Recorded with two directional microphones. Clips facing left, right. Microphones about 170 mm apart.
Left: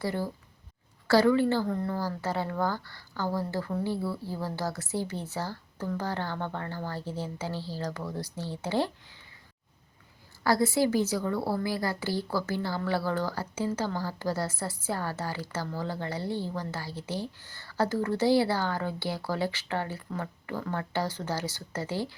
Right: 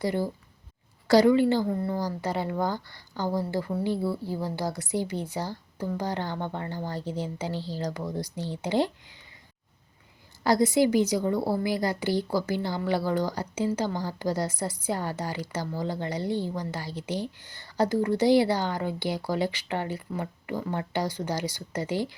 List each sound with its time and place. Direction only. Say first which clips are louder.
0.0 s a woman's voice: right 4 dB; 15° right (ahead or behind)
10.4 s a woman's voice: right 3 dB; 15° right (ahead or behind)